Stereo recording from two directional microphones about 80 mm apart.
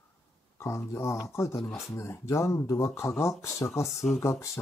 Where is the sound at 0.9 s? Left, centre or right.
Left.